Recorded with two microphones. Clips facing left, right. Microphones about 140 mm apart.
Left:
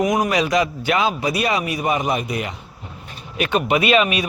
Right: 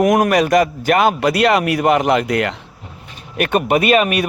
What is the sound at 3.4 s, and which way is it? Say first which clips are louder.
Speech: right 3 dB; 50° right (ahead or behind).